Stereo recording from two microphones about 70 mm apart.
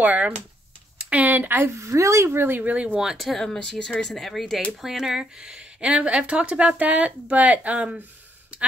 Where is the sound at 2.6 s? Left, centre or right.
Right.